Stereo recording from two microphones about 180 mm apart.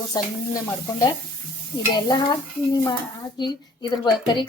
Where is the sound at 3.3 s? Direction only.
25° left (ahead or behind).